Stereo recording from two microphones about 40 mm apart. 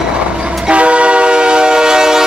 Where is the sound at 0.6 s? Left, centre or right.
Right; by 2.2 s centre.